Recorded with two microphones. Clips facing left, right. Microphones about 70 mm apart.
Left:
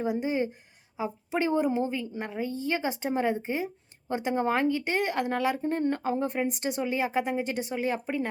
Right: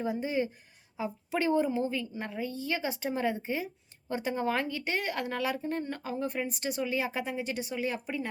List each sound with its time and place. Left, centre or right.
0.0 s a woman's voice: left